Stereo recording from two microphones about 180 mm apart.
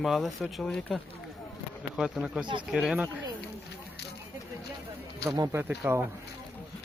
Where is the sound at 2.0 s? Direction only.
5° right (ahead or behind).